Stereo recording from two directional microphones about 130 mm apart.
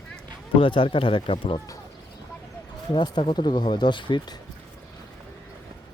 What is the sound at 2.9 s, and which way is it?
Speech, 40° left (ahead or behind).